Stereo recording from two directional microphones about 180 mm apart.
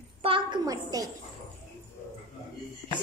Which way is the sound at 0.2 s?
25° right (ahead or behind).